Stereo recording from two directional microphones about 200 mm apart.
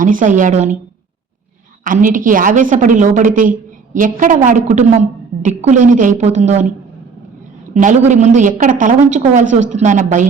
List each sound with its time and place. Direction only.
0.0 s a woman's voice: 40° right (ahead or behind)
1.8 s a woman's voice: 40° right (ahead or behind)